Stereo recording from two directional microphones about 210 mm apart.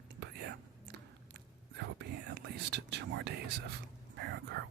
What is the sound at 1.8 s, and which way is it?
Whispering, 55° right (ahead or behind).